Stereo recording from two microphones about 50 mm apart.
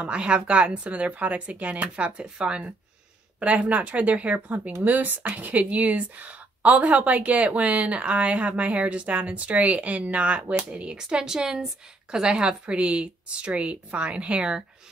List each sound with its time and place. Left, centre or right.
0.0 s a woman's voice: right